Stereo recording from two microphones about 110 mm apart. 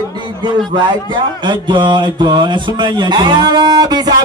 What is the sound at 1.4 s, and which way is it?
Speech, 45° right (ahead or behind).